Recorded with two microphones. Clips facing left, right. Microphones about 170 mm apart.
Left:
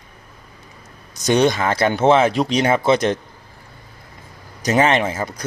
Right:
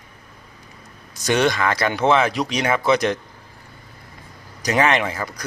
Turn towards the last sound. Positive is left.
turn(degrees=25)  # may be behind; listen again after turning